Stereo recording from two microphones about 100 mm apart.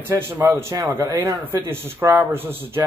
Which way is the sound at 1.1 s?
20° right (ahead or behind).